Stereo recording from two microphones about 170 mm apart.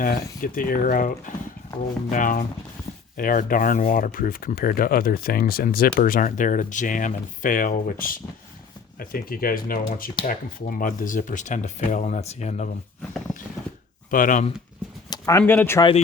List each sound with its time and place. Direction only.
0.0 s speech: 55° left (ahead or behind)
14.1 s speech: 50° left (ahead or behind)
15.1 s speech: 15° left (ahead or behind)